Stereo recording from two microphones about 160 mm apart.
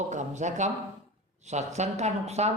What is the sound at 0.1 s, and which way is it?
Speech, 50° right (ahead or behind).